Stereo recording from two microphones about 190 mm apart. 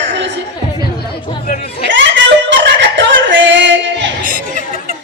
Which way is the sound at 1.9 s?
70° right (ahead or behind).